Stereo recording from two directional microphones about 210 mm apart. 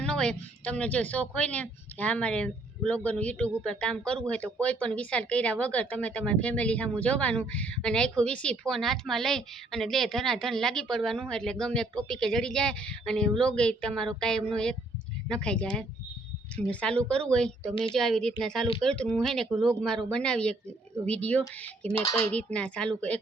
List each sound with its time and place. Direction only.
0.0 s a woman's voice: 5° left (ahead or behind)